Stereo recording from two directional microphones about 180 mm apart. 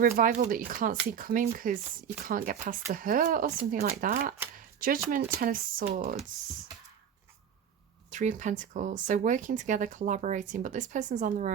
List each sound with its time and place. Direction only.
0.0 s speech: 50° right (ahead or behind)
4.5 s a sound: 50° right (ahead or behind)
5.1 s speech: 50° right (ahead or behind)
8.1 s speech: 45° right (ahead or behind)